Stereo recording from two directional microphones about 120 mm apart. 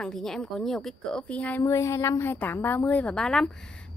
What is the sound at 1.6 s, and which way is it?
Speech, 25° left (ahead or behind).